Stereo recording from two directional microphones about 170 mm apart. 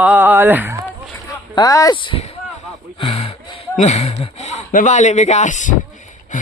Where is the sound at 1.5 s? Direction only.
20° left (ahead or behind); by 5.8 s 45° left (ahead or behind).